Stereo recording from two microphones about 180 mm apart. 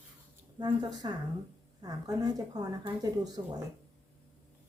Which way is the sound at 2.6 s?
20° right (ahead or behind).